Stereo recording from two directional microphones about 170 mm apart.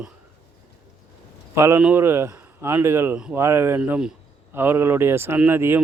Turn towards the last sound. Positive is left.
turn(degrees=-15)  # may be behind; listen again after turning